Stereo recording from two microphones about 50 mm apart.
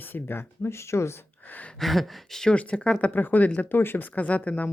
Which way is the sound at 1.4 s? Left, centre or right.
Left.